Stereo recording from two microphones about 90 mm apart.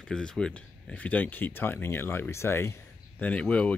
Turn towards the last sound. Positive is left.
turn(degrees=15)  # may be behind; listen again after turning